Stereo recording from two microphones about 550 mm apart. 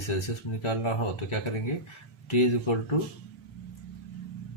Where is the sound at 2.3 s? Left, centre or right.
Left.